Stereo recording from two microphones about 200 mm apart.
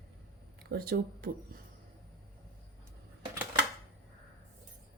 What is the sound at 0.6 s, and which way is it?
Speech, 50° right (ahead or behind).